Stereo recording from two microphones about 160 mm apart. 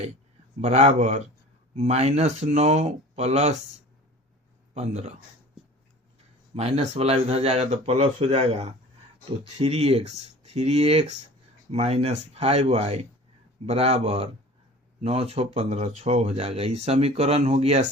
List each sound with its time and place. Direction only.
0.6 s speech: 45° right (ahead or behind)
4.7 s a man's voice: 45° right (ahead or behind)
6.5 s speech: 40° right (ahead or behind)